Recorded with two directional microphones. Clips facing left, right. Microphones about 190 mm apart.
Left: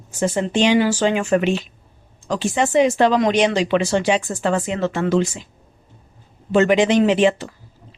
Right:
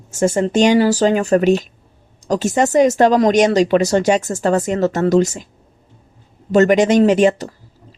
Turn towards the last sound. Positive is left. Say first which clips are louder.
# right 4 dB
turn(degrees=-40)  # may be behind; listen again after turning